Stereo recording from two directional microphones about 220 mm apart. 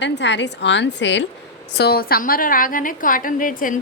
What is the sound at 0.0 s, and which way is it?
A woman's voice, 55° left (ahead or behind).